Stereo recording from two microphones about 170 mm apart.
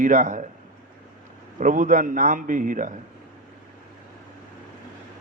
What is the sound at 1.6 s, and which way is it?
Mantra, 50° right (ahead or behind).